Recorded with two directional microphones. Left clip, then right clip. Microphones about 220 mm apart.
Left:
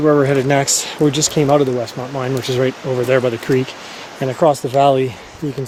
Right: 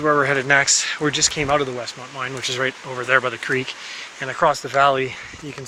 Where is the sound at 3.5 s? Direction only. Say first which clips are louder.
Left 6 dB; 20° right (ahead or behind).